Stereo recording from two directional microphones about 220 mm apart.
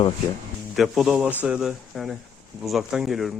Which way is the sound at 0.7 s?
Centre (ahead or behind).